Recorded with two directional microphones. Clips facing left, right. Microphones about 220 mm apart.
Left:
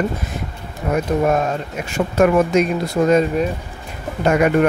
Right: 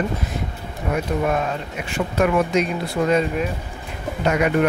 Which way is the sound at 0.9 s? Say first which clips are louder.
Left 4 dB; 45° left (ahead or behind).